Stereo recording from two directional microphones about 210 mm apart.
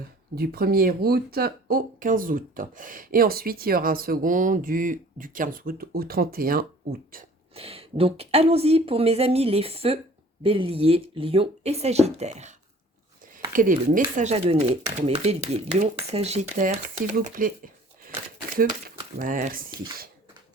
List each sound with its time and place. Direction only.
0.3 s speech: 45° right (ahead or behind)
7.5 s speech: 25° right (ahead or behind)
19.2 s speech: 40° right (ahead or behind)